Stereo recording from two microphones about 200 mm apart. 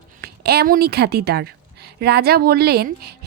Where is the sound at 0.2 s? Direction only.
50° right (ahead or behind).